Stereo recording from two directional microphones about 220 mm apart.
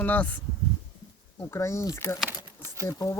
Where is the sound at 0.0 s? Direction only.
5° left (ahead or behind).